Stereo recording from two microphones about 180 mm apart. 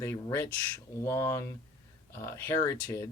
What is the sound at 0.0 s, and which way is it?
Speech, 10° left (ahead or behind).